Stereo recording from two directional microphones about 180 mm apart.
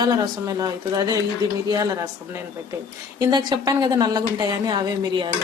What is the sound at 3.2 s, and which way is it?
A woman's voice, 25° right (ahead or behind).